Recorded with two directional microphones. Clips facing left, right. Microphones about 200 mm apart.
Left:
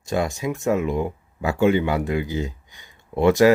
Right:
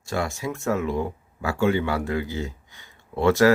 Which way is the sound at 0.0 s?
20° left (ahead or behind).